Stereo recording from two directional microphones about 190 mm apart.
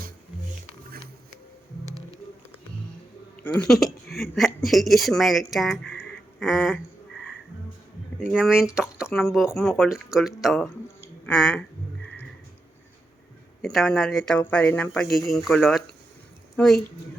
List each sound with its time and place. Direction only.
1.8 s music: 15° right (ahead or behind)
3.3 s a woman's voice: 10° left (ahead or behind)
8.2 s a woman's voice: 5° right (ahead or behind)
13.6 s a woman's voice: centre (ahead or behind)